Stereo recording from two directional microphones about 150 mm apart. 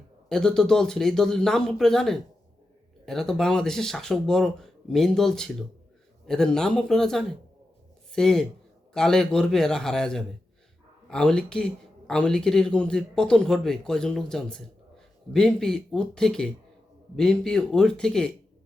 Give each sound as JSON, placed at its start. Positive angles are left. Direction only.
{"t": 0.3, "sound": "speech", "side_deg": 5}